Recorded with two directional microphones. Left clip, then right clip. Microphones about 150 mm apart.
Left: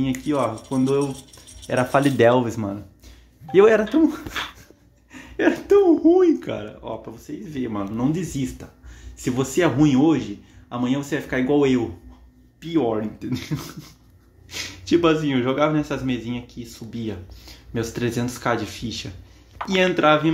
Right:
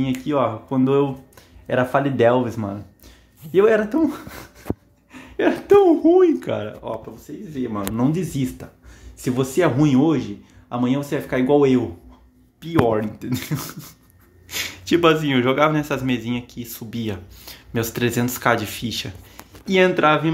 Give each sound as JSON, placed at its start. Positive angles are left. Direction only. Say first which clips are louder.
{"t": 0.2, "sound": "speech", "louder": "right 2 dB", "side_deg": -5}
{"t": 1.7, "sound": "speech", "louder": "even", "side_deg": 5}
{"t": 3.9, "sound": "a woman's voice", "louder": "left 2 dB", "side_deg": 0}
{"t": 6.4, "sound": "speech", "louder": "right 4 dB", "side_deg": -15}
{"t": 7.9, "sound": "speech", "louder": "right 2 dB", "side_deg": -20}
{"t": 9.2, "sound": "speech", "louder": "right 1 dB", "side_deg": -5}